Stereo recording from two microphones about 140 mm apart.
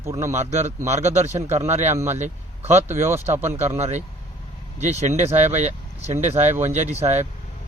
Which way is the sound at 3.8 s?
55° right (ahead or behind).